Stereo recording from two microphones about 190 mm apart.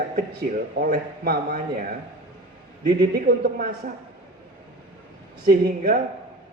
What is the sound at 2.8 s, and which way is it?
Speech, 55° right (ahead or behind).